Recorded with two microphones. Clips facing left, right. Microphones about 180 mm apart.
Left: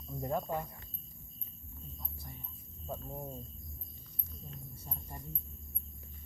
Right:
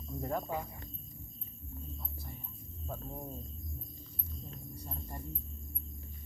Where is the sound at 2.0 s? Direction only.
5° right (ahead or behind).